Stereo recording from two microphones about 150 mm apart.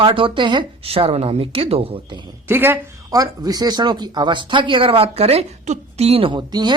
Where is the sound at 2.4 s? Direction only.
15° right (ahead or behind).